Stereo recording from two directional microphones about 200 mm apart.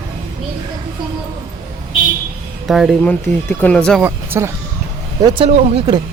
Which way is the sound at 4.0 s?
10° right (ahead or behind).